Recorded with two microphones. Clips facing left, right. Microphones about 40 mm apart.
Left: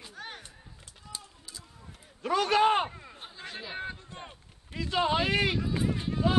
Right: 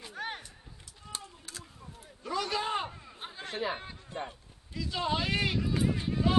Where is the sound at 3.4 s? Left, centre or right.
Right.